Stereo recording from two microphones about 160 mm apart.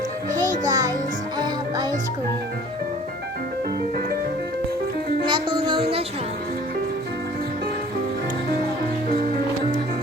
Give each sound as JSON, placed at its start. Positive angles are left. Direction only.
{"t": 0.7, "sound": "music", "side_deg": -25}
{"t": 5.3, "sound": "music", "side_deg": -30}